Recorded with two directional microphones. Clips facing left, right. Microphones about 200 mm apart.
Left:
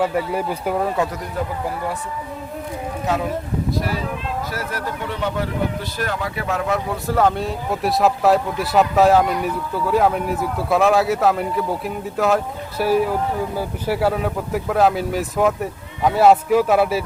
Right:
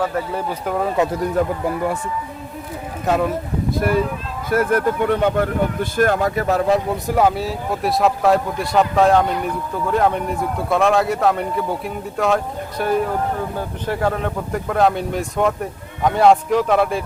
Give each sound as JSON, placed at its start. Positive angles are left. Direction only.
{"t": 0.0, "sound": "speech", "side_deg": 10}
{"t": 3.7, "sound": "speech", "side_deg": -55}
{"t": 6.9, "sound": "speech", "side_deg": -15}